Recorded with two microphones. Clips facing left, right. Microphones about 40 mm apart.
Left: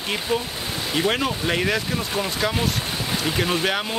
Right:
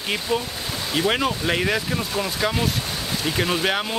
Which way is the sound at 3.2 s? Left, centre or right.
Centre.